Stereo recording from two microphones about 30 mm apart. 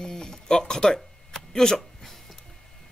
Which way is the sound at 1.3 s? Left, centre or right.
Centre.